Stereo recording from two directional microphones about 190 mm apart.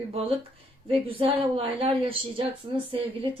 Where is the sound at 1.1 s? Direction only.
30° right (ahead or behind).